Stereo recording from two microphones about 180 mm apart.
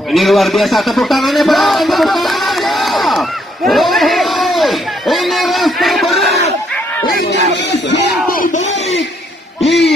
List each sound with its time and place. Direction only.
0.1 s a sound: centre (ahead or behind)
8.3 s crowd: 50° left (ahead or behind)
9.7 s hoot: centre (ahead or behind)